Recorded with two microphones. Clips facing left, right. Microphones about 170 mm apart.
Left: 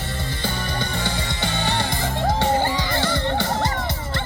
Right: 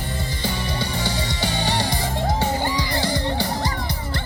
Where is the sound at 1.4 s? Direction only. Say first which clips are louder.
Even; 15° right (ahead or behind).